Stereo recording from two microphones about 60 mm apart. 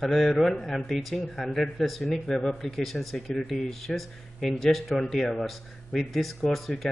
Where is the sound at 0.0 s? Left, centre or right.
Centre.